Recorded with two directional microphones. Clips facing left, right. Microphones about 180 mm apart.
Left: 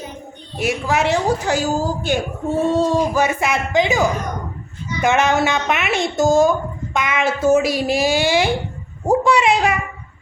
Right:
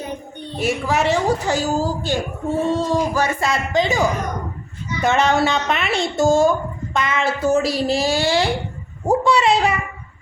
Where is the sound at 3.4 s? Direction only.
20° left (ahead or behind).